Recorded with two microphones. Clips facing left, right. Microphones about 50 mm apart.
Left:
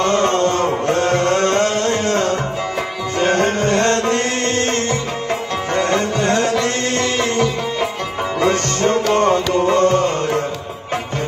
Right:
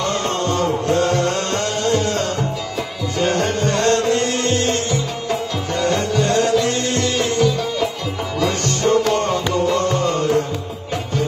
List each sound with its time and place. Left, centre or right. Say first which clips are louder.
0.0 s music: left 5 dB; left